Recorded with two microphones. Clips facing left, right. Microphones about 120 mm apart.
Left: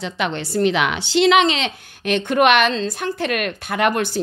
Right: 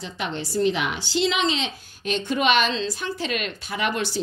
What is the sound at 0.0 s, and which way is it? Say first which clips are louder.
A woman's voice: left 6 dB; 70° left (ahead or behind).